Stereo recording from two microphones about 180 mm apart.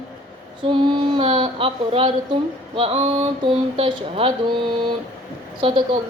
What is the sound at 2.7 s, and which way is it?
Speech, 30° right (ahead or behind).